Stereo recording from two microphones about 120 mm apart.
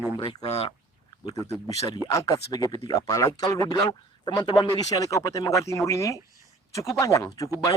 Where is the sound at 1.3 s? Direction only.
30° left (ahead or behind).